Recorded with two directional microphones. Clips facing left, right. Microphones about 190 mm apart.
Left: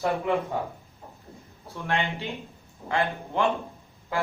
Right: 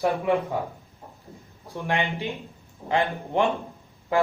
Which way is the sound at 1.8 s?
15° right (ahead or behind).